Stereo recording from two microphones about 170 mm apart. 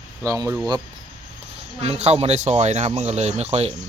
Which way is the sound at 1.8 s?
35° right (ahead or behind).